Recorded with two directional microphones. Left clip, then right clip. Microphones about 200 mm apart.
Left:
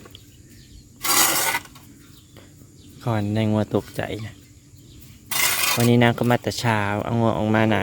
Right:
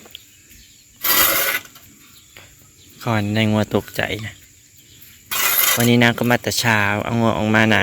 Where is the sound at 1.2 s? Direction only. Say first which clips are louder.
Right 2 dB; 35° left (ahead or behind).